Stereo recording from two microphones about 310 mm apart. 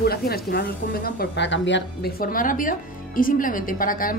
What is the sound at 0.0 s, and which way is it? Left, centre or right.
A woman's voice, left.